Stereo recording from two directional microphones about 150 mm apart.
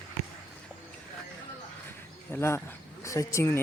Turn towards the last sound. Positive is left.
turn(degrees=15)  # may be behind; listen again after turning